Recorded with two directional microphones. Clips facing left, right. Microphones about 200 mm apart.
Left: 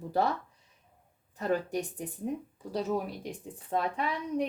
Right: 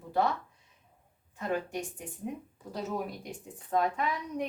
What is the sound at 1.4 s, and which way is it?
Speech, 40° left (ahead or behind).